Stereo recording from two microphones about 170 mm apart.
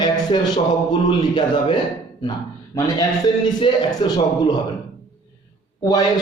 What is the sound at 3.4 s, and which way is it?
A man's voice, 25° left (ahead or behind).